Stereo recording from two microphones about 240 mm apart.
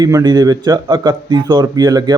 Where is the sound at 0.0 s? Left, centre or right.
Centre.